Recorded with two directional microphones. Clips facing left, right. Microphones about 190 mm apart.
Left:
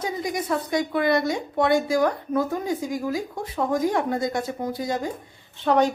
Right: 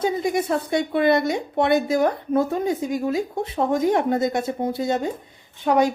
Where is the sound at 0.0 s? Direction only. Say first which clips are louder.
Right 6 dB; 25° right (ahead or behind).